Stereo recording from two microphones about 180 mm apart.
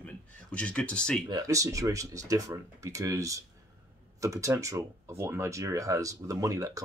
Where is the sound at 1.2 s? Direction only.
20° right (ahead or behind).